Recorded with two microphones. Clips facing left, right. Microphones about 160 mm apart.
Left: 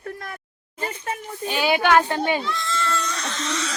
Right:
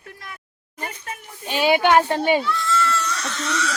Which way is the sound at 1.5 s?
20° right (ahead or behind).